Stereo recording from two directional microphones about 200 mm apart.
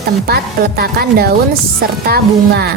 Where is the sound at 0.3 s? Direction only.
50° right (ahead or behind).